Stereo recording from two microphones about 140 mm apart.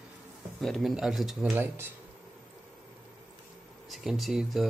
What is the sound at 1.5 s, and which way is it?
Speech, 15° right (ahead or behind).